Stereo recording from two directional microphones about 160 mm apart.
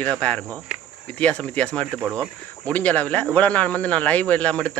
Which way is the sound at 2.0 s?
15° right (ahead or behind).